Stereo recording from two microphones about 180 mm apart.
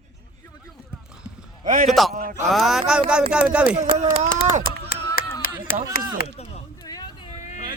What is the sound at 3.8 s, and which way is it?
Speech, 40° right (ahead or behind).